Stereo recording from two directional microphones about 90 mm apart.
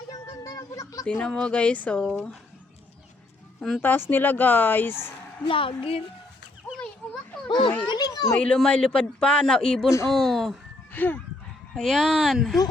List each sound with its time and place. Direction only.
0.1 s a sound: 45° left (ahead or behind)
1.0 s speech: 10° left (ahead or behind)
3.8 s speech: 25° left (ahead or behind)
5.5 s a woman's voice: 75° left (ahead or behind)
7.4 s a child's voice: 65° left (ahead or behind)
7.9 s a sound: 50° left (ahead or behind)
8.4 s speech: 10° left (ahead or behind)
10.9 s chicken: 20° left (ahead or behind)
11.7 s speech: centre (ahead or behind)